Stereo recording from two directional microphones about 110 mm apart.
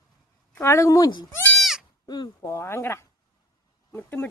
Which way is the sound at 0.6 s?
25° left (ahead or behind).